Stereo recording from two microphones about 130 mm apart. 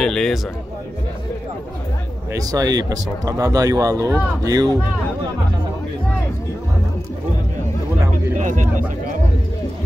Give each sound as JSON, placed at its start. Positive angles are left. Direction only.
{"t": 0.0, "sound": "speech", "side_deg": 5}
{"t": 2.3, "sound": "speech", "side_deg": -30}
{"t": 8.4, "sound": "speech", "side_deg": -75}